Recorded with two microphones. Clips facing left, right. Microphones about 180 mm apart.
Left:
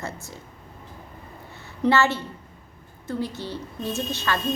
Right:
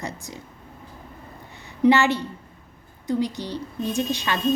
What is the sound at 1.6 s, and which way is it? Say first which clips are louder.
A woman's voice: right 3 dB; 15° right (ahead or behind).